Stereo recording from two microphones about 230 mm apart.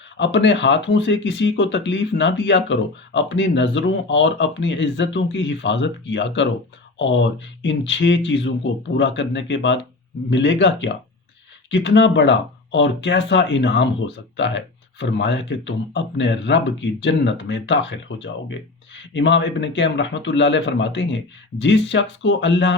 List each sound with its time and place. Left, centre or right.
0.2 s speech: left